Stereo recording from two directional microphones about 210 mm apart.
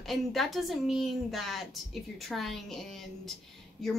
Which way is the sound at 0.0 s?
Centre (ahead or behind).